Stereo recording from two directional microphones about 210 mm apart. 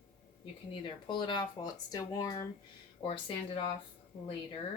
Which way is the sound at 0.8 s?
20° left (ahead or behind).